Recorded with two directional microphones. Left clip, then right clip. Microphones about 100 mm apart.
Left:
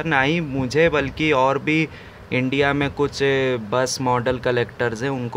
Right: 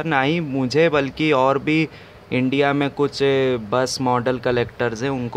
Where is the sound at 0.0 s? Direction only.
25° right (ahead or behind).